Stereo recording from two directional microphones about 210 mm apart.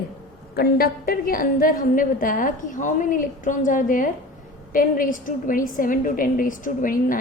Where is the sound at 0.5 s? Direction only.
45° left (ahead or behind).